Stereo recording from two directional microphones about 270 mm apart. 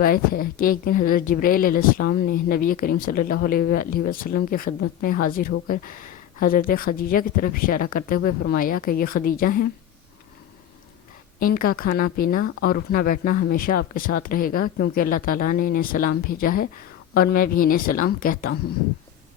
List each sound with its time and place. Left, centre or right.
0.0 s speech: left
11.3 s speech: left